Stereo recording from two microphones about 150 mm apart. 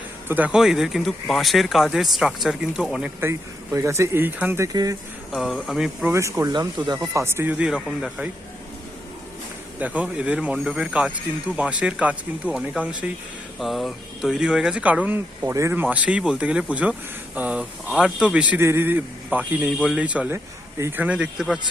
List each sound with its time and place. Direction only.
0.3 s speech: 10° right (ahead or behind)
3.2 s speech: 15° right (ahead or behind)
5.3 s speech: centre (ahead or behind)
6.1 s speech: 20° right (ahead or behind); by 8.3 s 5° right (ahead or behind)
9.7 s speech: 10° right (ahead or behind)